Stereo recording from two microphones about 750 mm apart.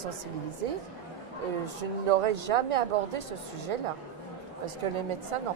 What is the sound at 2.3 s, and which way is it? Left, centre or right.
Speech, right.